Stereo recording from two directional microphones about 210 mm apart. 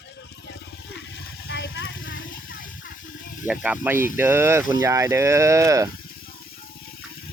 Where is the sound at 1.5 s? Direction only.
60° left (ahead or behind).